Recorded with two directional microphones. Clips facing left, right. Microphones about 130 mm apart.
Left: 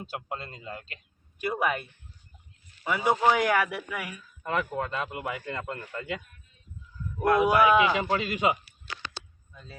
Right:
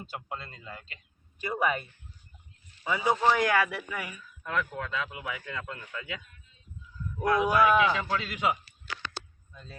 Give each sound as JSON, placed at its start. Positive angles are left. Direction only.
{"t": 0.0, "sound": "speech", "side_deg": 10}
{"t": 4.4, "sound": "speech", "side_deg": 55}
{"t": 7.3, "sound": "speech", "side_deg": 5}
{"t": 8.1, "sound": "a man's voice", "side_deg": 55}